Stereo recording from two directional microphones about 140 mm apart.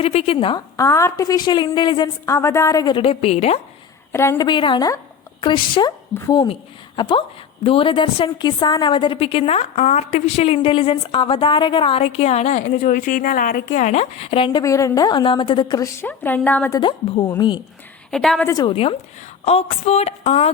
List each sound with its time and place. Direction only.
0.0 s a woman's voice: 45° left (ahead or behind)
0.8 s a woman's voice: 20° left (ahead or behind)
2.2 s a woman's voice: 20° left (ahead or behind); by 3.6 s 45° left (ahead or behind)
4.1 s a woman's voice: 20° left (ahead or behind)
4.4 s a woman's voice: 35° left (ahead or behind)
14.6 s a woman's voice: 20° left (ahead or behind)
15.8 s a woman's voice: 15° left (ahead or behind)
18.1 s a woman's voice: 5° left (ahead or behind)
18.4 s a woman's voice: 25° left (ahead or behind)
18.7 s a woman's voice: 45° left (ahead or behind)